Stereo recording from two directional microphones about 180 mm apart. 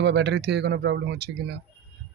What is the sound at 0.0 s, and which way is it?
Speech, 70° right (ahead or behind).